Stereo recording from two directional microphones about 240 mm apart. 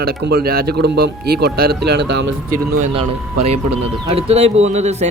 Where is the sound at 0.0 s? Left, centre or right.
Right.